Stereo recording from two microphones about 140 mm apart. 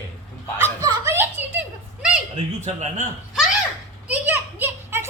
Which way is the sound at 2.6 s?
55° right (ahead or behind).